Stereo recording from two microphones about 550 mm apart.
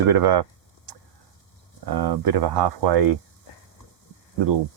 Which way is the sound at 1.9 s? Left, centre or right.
Right.